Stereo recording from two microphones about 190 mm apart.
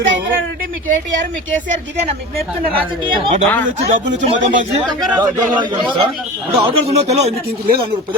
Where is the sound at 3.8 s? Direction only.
65° right (ahead or behind).